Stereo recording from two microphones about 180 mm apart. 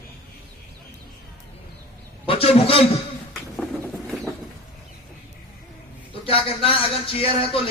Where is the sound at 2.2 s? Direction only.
30° left (ahead or behind).